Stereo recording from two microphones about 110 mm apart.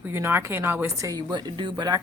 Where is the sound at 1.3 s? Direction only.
45° right (ahead or behind).